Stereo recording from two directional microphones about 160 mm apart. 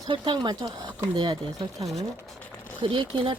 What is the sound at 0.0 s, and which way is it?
Speech, 30° right (ahead or behind).